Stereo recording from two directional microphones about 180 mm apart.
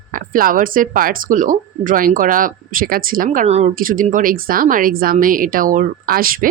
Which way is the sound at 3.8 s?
50° right (ahead or behind).